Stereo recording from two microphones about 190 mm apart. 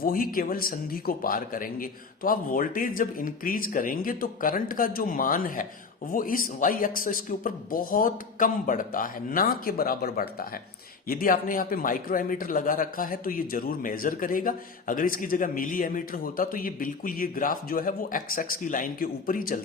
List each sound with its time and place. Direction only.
0.0 s a man's voice: 50° left (ahead or behind)